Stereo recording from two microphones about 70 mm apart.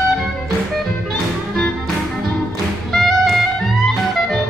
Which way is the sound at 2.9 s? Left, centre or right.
Centre.